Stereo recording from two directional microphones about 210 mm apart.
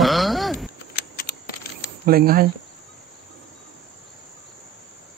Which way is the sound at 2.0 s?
45° right (ahead or behind).